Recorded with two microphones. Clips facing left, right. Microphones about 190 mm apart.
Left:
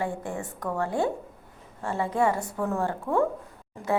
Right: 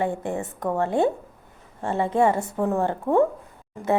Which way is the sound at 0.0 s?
20° right (ahead or behind).